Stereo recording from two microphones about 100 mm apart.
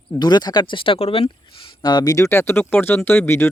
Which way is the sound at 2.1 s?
25° left (ahead or behind).